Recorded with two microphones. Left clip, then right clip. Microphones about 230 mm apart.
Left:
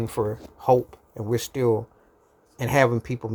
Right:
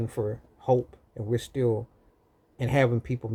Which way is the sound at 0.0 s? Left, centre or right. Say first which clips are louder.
Left 5 dB; centre.